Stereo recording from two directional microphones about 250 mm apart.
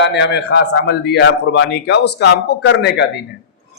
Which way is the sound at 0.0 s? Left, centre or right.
Left.